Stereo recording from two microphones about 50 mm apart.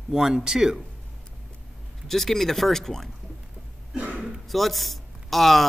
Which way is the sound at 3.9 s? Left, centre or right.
Right.